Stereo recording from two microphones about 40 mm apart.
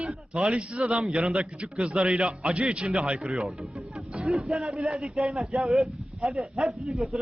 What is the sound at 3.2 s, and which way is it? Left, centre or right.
A man's voice, centre.